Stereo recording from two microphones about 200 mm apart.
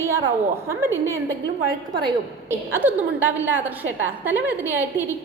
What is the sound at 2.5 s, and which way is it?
Speech, 10° right (ahead or behind).